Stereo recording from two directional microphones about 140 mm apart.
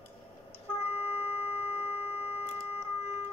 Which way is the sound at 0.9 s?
45° left (ahead or behind).